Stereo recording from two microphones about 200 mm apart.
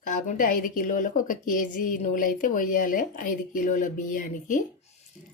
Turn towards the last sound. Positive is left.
turn(degrees=40)  # may be behind; listen again after turning